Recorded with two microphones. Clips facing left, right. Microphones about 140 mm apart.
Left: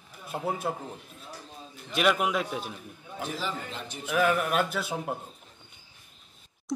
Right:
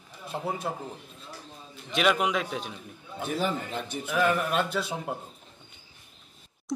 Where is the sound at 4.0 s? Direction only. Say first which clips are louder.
Left 1 dB; centre (ahead or behind).